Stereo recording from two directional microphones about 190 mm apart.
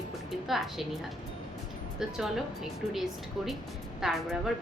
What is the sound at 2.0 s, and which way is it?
Speech, centre (ahead or behind).